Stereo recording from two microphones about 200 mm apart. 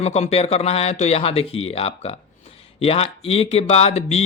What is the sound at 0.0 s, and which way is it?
Speech, 30° left (ahead or behind).